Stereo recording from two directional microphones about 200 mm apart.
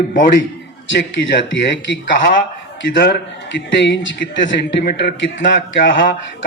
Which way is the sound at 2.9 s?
55° left (ahead or behind).